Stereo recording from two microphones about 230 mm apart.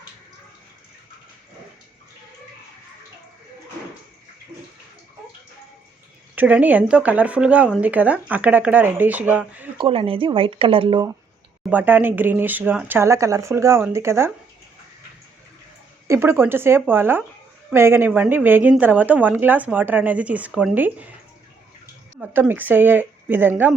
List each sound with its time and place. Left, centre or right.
6.3 s speech: centre
9.7 s speech: right
11.7 s speech: centre
16.0 s speech: centre
22.2 s speech: centre